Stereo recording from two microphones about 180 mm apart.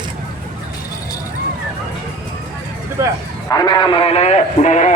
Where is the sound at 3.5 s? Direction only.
25° left (ahead or behind); by 4.9 s 40° left (ahead or behind).